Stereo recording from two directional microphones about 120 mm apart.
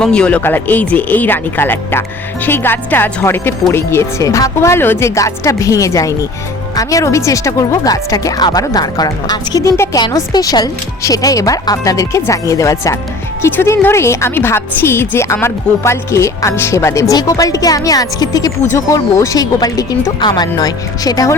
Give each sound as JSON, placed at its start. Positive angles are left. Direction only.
{"t": 0.0, "sound": "a woman's voice", "side_deg": 10}